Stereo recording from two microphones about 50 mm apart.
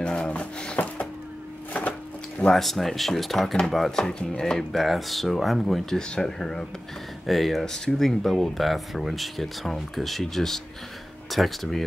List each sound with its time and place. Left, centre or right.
0.0 s a sound: left
2.4 s speech: centre
4.0 s speech: centre
5.9 s speech: centre